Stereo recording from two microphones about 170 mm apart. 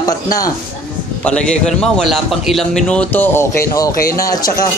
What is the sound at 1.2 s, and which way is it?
A man's voice, 5° left (ahead or behind).